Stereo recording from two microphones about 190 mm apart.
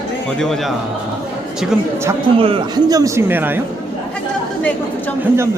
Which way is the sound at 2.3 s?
30° right (ahead or behind).